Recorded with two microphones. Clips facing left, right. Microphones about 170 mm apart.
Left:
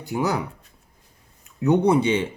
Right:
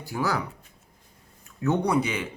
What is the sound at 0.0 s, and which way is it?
Speech, 20° left (ahead or behind).